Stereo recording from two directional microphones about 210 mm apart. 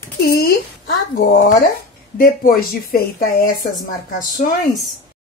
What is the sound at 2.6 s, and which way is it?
Speech, 45° left (ahead or behind).